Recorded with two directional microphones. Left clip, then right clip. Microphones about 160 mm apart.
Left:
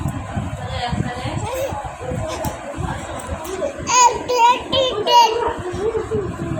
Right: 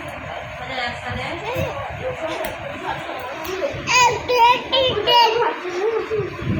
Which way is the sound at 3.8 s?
15° left (ahead or behind).